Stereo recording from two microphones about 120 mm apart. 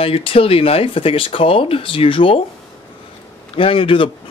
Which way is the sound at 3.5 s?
50° left (ahead or behind).